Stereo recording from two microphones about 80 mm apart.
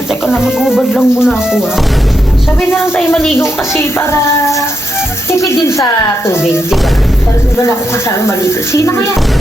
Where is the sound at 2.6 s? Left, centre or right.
Left.